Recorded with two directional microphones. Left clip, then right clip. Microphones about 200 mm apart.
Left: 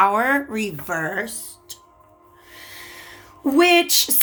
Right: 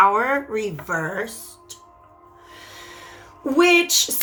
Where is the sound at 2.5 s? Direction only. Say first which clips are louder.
Left 2 dB; 55° left (ahead or behind).